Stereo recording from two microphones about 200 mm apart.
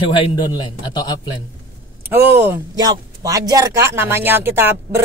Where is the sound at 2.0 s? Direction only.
10° right (ahead or behind).